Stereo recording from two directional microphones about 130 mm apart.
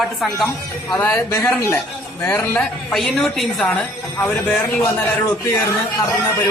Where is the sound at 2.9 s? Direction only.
5° left (ahead or behind).